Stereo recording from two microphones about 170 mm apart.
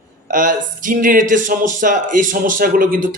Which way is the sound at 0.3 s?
50° right (ahead or behind).